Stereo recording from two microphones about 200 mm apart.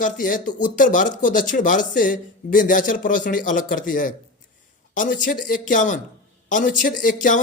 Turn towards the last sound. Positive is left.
turn(degrees=40)  # may be behind; listen again after turning